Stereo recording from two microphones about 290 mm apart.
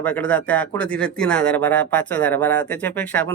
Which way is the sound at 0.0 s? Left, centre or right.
Centre.